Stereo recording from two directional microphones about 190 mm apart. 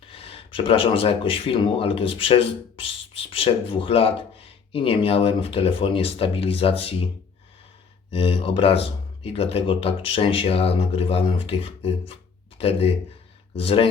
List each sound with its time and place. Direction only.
0.1 s speech: 30° left (ahead or behind)
8.1 s speech: 30° left (ahead or behind)